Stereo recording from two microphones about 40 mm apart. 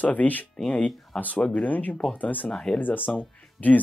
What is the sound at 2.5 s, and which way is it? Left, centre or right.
Speech, left.